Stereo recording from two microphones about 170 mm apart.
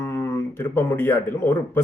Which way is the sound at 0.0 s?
15° left (ahead or behind).